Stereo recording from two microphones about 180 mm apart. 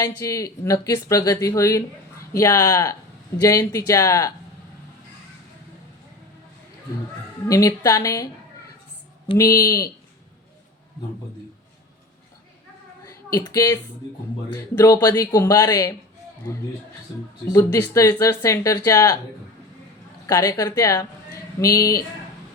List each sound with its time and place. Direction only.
0.0 s speech: 20° left (ahead or behind)
7.4 s speech: 20° left (ahead or behind)
9.4 s speech: 20° left (ahead or behind)
13.1 s a woman's voice: 20° left (ahead or behind)
17.5 s speech: 15° left (ahead or behind)
20.2 s speech: 20° left (ahead or behind)